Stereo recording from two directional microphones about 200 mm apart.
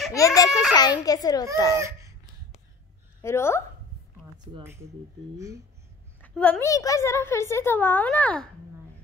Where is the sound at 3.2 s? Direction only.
15° left (ahead or behind).